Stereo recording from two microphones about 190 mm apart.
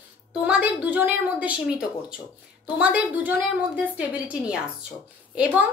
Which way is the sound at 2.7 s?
5° right (ahead or behind).